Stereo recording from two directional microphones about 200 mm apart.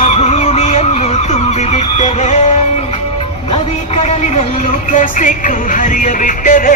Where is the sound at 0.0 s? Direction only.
30° left (ahead or behind).